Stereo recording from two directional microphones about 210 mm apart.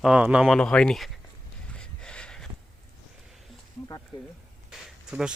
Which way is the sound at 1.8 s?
5° left (ahead or behind).